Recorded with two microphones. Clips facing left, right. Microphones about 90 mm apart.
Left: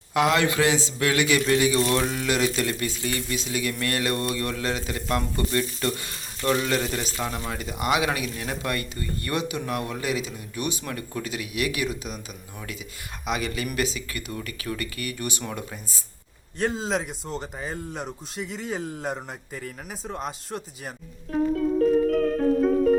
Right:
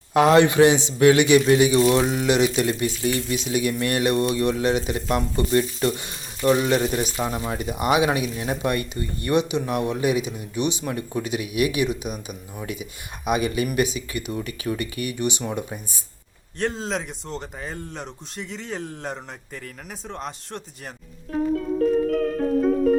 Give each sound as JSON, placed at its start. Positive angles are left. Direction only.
{"t": 0.1, "sound": "speech", "side_deg": -30}
{"t": 1.8, "sound": "speech", "side_deg": -5}
{"t": 12.0, "sound": "speech", "side_deg": -10}
{"t": 16.6, "sound": "speech", "side_deg": 0}